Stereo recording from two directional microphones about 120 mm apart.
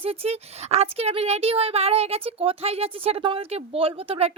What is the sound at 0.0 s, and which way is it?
Speech, 55° right (ahead or behind).